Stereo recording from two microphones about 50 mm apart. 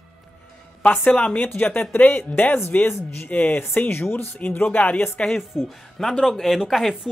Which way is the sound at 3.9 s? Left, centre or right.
Left.